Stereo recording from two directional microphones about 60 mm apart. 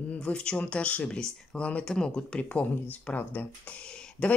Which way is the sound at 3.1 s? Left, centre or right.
Left.